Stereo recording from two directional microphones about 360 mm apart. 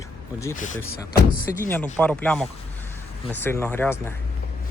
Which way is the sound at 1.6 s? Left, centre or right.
Centre.